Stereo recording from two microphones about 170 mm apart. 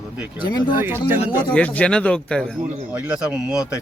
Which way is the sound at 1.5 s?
10° left (ahead or behind).